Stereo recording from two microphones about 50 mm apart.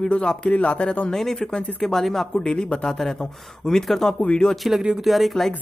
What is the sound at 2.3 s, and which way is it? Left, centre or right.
Speech, centre.